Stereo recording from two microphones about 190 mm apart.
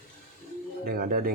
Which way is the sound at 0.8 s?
50° right (ahead or behind).